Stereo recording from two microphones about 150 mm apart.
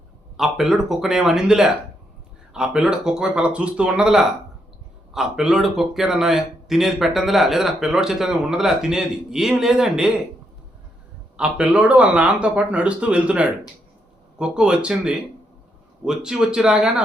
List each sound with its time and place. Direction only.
0.3 s speech: centre (ahead or behind)
11.3 s speech: 5° right (ahead or behind)